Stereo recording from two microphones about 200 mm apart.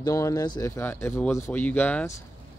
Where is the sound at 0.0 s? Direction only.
15° left (ahead or behind).